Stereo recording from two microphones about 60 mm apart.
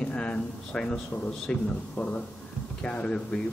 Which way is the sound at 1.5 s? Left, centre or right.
Centre.